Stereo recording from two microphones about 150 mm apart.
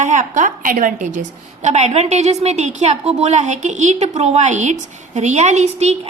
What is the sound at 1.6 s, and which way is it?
A woman's voice, 50° right (ahead or behind).